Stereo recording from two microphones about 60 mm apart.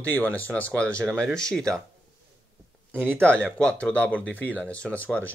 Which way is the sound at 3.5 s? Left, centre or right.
Centre.